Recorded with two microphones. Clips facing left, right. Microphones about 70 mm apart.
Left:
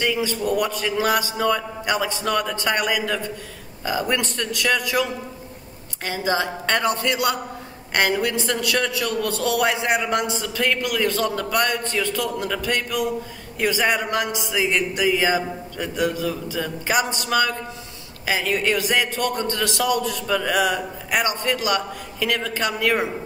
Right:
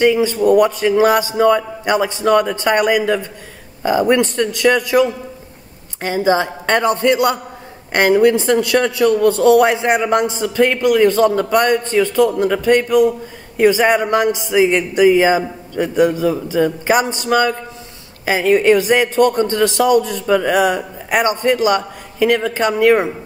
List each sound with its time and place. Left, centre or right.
0.0 s a man's voice: right
6.0 s a man's voice: right